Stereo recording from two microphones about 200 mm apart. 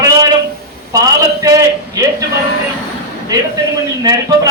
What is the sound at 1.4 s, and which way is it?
Speech, 15° right (ahead or behind).